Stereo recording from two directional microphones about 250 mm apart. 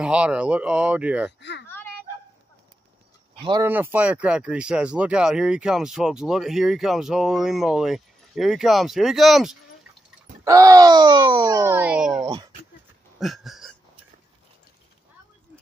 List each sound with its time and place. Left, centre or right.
0.0 s speech: centre
1.7 s a sound: centre
3.3 s speech: centre
10.4 s speech: centre
12.2 s speech: centre
13.2 s a sound: centre